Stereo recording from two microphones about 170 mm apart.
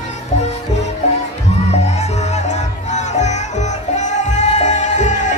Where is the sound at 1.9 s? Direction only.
40° left (ahead or behind).